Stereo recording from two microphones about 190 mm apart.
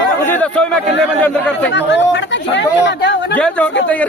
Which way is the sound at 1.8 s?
65° left (ahead or behind).